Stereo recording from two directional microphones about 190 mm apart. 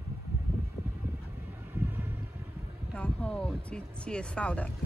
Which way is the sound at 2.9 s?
5° left (ahead or behind).